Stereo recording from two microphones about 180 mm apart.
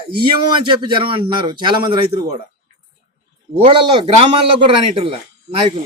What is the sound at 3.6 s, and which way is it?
A man's voice, 30° right (ahead or behind).